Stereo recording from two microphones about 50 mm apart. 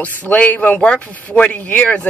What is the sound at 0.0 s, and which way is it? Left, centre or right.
Speech, left.